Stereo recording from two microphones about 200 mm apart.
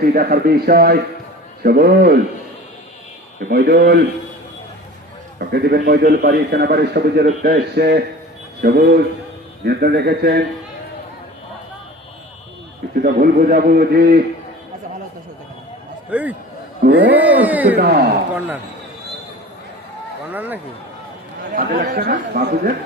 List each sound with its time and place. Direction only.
0.0 s a man's voice: 45° right (ahead or behind)
3.5 s a man's voice: 50° right (ahead or behind)
5.4 s a man's voice: 50° right (ahead or behind)
13.0 s a man's voice: 45° right (ahead or behind)
16.0 s a man's voice: 5° right (ahead or behind)
16.8 s a man's voice: 50° right (ahead or behind)
17.1 s speech: 10° right (ahead or behind)
17.7 s a man's voice: 55° right (ahead or behind)
20.3 s speech: 10° right (ahead or behind)
21.5 s a man's voice: 45° right (ahead or behind)